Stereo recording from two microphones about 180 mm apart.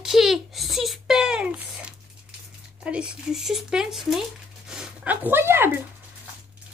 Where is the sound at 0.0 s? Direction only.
Centre (ahead or behind).